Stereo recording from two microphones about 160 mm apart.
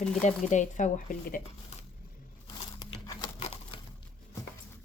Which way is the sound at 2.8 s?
25° left (ahead or behind).